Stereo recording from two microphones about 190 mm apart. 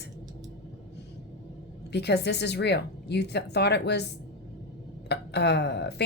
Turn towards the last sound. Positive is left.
turn(degrees=60)  # may be behind; listen again after turning